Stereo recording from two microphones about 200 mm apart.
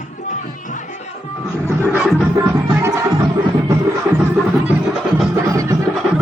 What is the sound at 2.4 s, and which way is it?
Music, 15° right (ahead or behind).